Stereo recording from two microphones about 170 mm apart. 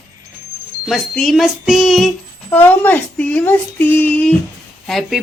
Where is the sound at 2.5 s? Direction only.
10° left (ahead or behind).